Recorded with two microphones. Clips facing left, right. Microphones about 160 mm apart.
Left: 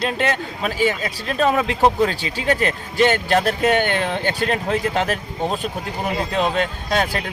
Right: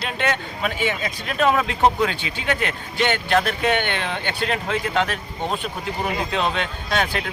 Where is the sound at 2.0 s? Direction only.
40° left (ahead or behind).